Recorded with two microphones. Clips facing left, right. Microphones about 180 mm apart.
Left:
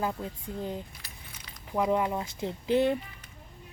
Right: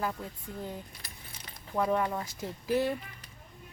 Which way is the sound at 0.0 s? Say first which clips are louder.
Left 3 dB; 20° left (ahead or behind).